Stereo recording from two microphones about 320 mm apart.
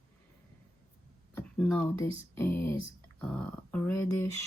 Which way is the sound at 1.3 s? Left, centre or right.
Centre.